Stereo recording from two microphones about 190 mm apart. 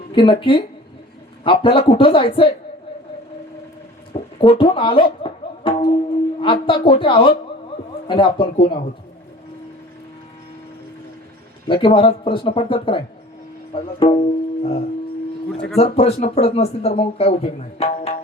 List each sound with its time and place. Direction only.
0.1 s speech: 25° left (ahead or behind)
4.1 s a sound: 30° left (ahead or behind)
4.7 s music: 25° left (ahead or behind)
6.4 s speech: 25° left (ahead or behind)
11.7 s speech: 25° left (ahead or behind)